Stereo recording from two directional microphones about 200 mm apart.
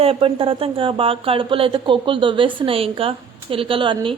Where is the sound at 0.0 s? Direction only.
30° right (ahead or behind).